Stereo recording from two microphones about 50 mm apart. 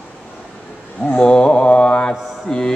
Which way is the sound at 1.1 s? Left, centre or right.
Centre.